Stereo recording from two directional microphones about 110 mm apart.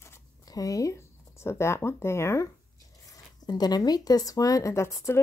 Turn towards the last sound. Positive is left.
turn(degrees=25)  # may be behind; listen again after turning